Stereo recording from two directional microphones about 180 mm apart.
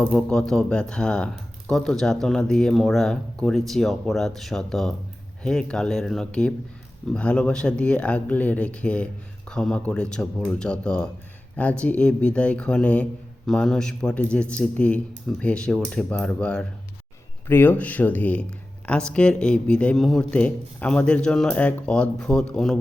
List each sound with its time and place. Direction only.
0.0 s speech: 5° left (ahead or behind)